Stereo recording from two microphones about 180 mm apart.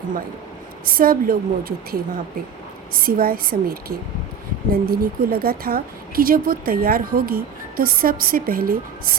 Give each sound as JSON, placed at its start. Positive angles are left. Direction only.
{"t": 0.9, "sound": "a woman's voice", "side_deg": -55}